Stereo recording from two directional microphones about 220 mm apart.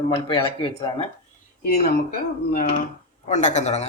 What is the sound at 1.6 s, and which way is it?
Speech, 45° left (ahead or behind).